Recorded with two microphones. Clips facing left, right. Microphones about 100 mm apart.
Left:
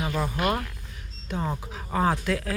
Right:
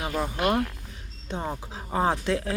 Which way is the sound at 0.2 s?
15° right (ahead or behind).